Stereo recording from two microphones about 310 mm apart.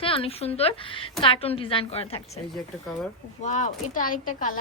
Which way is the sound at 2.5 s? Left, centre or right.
Centre.